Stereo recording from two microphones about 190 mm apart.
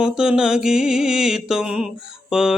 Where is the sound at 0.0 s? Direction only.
5° right (ahead or behind).